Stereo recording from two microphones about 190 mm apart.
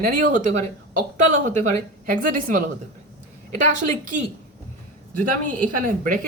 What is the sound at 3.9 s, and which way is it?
Speech, 40° right (ahead or behind).